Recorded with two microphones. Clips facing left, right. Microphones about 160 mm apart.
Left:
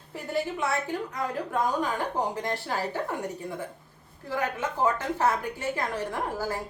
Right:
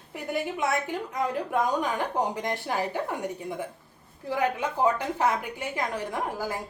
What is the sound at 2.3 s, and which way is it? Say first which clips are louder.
Speech: right 1 dB; 15° right (ahead or behind).